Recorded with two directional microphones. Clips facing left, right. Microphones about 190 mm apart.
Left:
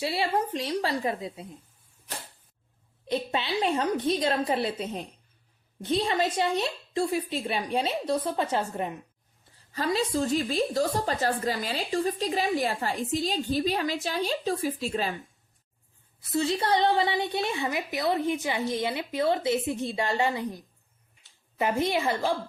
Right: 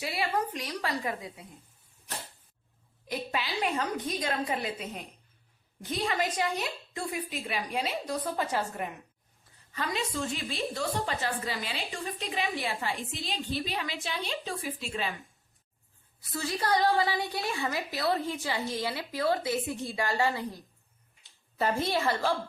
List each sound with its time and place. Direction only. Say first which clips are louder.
0.0 s a woman's voice: left 4 dB; 30° left (ahead or behind)
3.1 s a woman's voice: left 5 dB; 25° left (ahead or behind)
16.3 s a woman's voice: left 4 dB; 25° left (ahead or behind)
21.6 s a woman's voice: left 2 dB; 15° left (ahead or behind)